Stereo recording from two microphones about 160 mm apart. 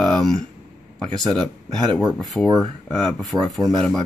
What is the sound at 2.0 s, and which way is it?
Speech, centre (ahead or behind).